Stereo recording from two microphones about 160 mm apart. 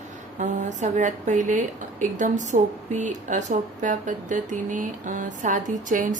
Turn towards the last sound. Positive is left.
turn(degrees=-55)  # may be behind; listen again after turning